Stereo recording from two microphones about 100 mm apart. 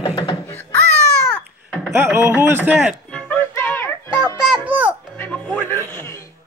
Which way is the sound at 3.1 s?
15° left (ahead or behind).